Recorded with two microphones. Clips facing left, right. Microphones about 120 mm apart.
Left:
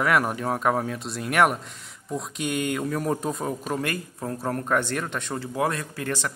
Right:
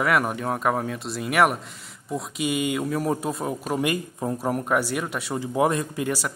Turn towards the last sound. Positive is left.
turn(degrees=-10)  # may be behind; listen again after turning